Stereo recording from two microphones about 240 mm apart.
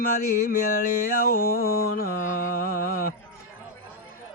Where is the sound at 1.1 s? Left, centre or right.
Left.